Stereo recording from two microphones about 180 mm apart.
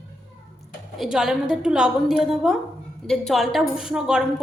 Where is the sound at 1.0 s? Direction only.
Centre (ahead or behind).